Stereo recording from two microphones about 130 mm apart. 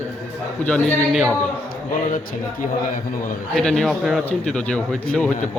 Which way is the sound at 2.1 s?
90° left.